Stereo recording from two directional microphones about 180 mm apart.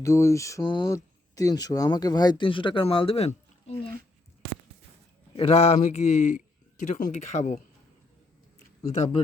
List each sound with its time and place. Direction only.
0.0 s a sound: 15° left (ahead or behind)
0.9 s speech: 20° left (ahead or behind); by 3.8 s 35° left (ahead or behind)
5.4 s speech: 35° left (ahead or behind)